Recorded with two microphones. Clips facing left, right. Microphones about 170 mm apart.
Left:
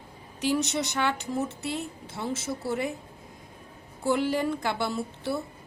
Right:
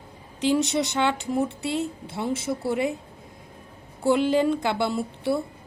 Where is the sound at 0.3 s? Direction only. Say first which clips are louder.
Right 4 dB; 20° right (ahead or behind).